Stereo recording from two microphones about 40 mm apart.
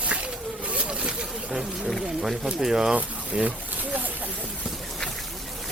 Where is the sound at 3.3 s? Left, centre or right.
Right.